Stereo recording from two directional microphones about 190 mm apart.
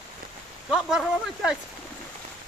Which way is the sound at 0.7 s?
5° right (ahead or behind).